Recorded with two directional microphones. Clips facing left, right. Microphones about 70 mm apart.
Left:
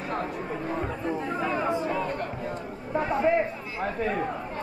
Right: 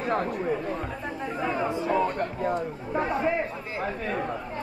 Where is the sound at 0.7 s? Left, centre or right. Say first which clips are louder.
Left 2 dB; left.